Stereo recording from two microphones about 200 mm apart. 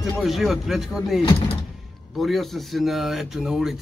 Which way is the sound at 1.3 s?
30° left (ahead or behind).